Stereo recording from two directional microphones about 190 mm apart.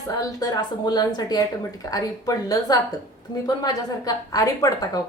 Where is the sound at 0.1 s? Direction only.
20° left (ahead or behind).